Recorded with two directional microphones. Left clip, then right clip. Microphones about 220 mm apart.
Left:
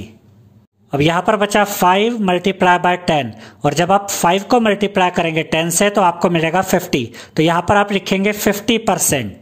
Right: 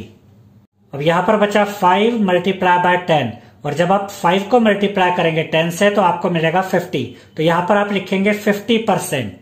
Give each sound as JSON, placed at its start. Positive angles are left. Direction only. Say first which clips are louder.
{"t": 0.9, "sound": "speech", "louder": "even", "side_deg": 45}